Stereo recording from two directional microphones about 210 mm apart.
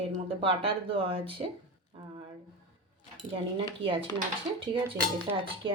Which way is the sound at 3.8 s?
25° right (ahead or behind).